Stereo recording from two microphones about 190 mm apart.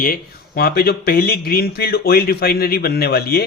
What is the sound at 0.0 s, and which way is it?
Speech, 50° left (ahead or behind).